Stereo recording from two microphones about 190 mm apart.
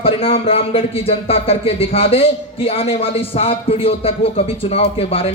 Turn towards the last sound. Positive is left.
turn(degrees=30)  # may be behind; listen again after turning